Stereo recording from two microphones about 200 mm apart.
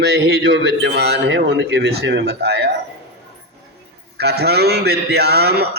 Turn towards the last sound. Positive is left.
turn(degrees=-55)  # may be behind; listen again after turning